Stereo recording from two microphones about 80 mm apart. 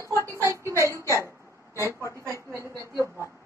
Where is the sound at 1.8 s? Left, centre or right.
Left.